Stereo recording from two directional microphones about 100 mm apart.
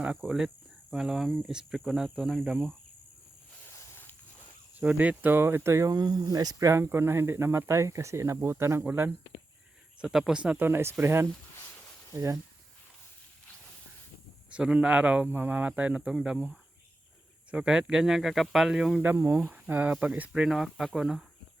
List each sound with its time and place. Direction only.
0.2 s speech: centre (ahead or behind)
3.8 s a sound: 20° left (ahead or behind)
4.8 s speech: 15° right (ahead or behind)
10.0 s speech: 5° right (ahead or behind); by 12.4 s 30° right (ahead or behind)
14.5 s speech: 10° right (ahead or behind)
19.0 s speech: 20° right (ahead or behind)